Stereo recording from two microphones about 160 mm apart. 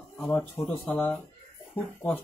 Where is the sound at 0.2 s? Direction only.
10° left (ahead or behind).